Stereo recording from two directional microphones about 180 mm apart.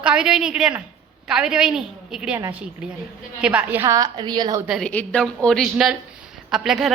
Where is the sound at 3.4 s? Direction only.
10° right (ahead or behind).